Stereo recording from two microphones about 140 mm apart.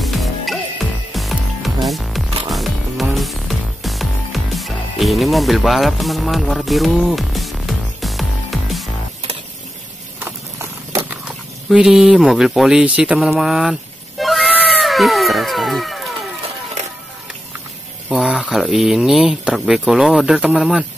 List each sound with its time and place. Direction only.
0.0 s music: centre (ahead or behind)
10.2 s snake: 15° right (ahead or behind)
11.1 s speech: 5° right (ahead or behind)
14.8 s a sound: centre (ahead or behind)
18.1 s speech: 5° right (ahead or behind)